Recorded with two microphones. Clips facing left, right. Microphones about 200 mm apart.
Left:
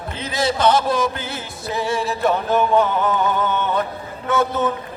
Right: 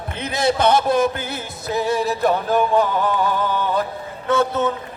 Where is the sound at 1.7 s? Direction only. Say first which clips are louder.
Right 2 dB; 40° right (ahead or behind).